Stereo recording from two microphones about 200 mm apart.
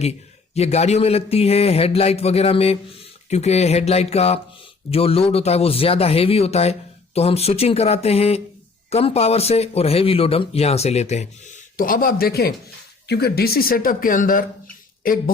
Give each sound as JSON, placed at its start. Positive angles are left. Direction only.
{"t": 0.0, "sound": "speech", "side_deg": 30}